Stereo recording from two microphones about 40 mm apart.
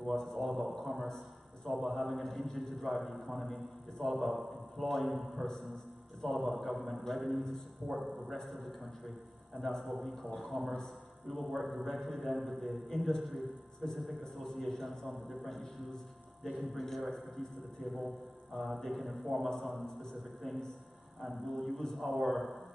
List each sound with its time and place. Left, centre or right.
0.0 s a man's voice: centre
1.0 s a sound: centre
1.7 s a man's voice: centre
14.2 s a man's voice: centre
17.8 s a man's voice: centre